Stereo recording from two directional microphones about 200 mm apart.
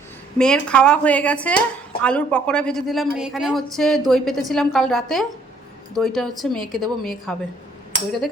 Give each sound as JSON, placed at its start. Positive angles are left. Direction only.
{"t": 0.3, "sound": "a woman's voice", "side_deg": 5}